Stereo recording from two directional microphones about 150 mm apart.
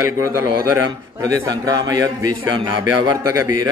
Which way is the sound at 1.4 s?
25° right (ahead or behind).